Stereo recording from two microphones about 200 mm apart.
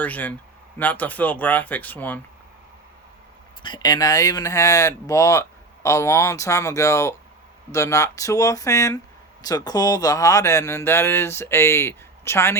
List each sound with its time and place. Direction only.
0.0 s speech: 10° left (ahead or behind)
3.6 s speech: 20° left (ahead or behind)